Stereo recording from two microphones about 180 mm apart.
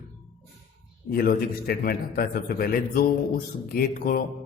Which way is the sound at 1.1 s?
55° left (ahead or behind).